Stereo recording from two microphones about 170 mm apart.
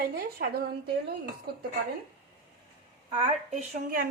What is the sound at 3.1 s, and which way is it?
Speech, 30° right (ahead or behind).